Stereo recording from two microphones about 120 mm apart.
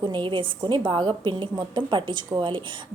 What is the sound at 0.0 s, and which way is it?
A woman's voice, 40° right (ahead or behind).